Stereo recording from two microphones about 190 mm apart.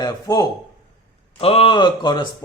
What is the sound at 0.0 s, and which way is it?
Speech, 20° left (ahead or behind).